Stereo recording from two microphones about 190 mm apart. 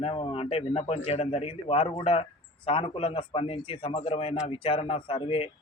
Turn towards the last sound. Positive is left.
turn(degrees=30)  # may be behind; listen again after turning